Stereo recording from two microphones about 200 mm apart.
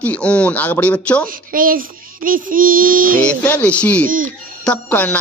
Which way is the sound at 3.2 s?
5° left (ahead or behind).